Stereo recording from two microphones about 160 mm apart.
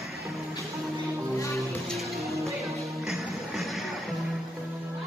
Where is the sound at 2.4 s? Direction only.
Centre (ahead or behind).